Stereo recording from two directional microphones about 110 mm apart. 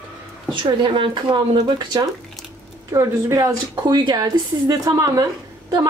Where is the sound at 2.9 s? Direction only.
30° right (ahead or behind).